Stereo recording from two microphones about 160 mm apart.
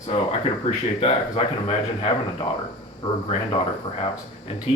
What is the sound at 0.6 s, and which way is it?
Speech, 40° left (ahead or behind).